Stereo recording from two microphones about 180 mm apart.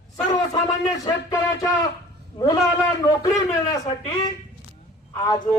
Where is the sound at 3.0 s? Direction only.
20° left (ahead or behind).